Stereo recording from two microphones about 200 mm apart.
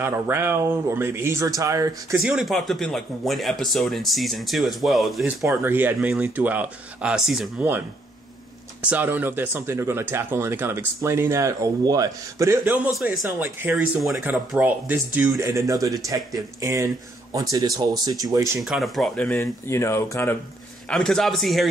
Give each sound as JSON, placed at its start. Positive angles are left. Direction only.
{"t": 0.0, "sound": "speech", "side_deg": -10}
{"t": 2.1, "sound": "speech", "side_deg": 0}
{"t": 5.4, "sound": "speech", "side_deg": -10}
{"t": 8.8, "sound": "speech", "side_deg": -10}
{"t": 18.6, "sound": "speech", "side_deg": 0}
{"t": 20.9, "sound": "speech", "side_deg": 0}